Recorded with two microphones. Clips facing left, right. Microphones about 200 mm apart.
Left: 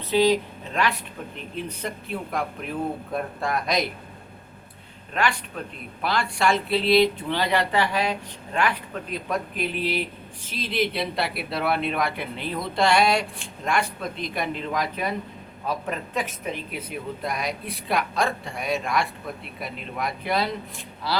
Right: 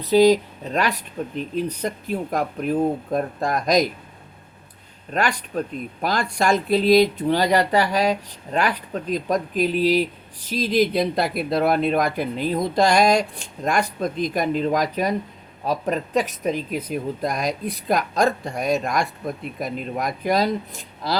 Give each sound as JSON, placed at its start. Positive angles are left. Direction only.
{"t": 0.0, "sound": "speech", "side_deg": -40}
{"t": 5.1, "sound": "speech", "side_deg": -40}